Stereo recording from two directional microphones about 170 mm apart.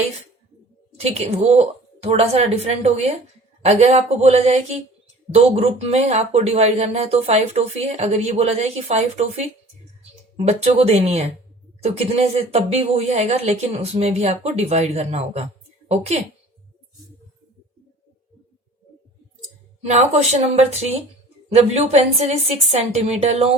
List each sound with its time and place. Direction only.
0.9 s speech: 40° right (ahead or behind)
19.8 s speech: 40° right (ahead or behind)